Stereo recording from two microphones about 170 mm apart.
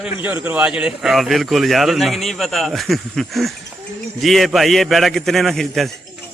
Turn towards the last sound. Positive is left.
turn(degrees=0)  # may be behind; listen again after turning